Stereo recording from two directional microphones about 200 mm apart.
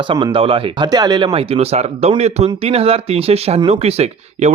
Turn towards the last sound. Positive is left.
turn(degrees=-30)  # may be behind; listen again after turning